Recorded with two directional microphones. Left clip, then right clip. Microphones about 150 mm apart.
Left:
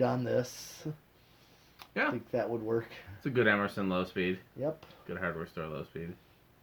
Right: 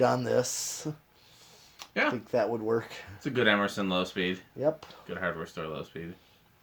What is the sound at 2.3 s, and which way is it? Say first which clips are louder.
Speech: right 5 dB; 45° right (ahead or behind).